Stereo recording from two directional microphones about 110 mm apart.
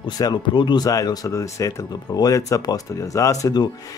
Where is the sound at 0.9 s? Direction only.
35° left (ahead or behind).